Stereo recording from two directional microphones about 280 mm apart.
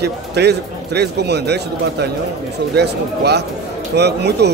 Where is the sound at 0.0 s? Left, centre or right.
Right.